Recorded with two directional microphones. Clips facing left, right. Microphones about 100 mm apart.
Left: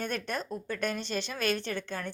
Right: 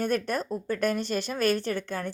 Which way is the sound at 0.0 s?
45° right (ahead or behind).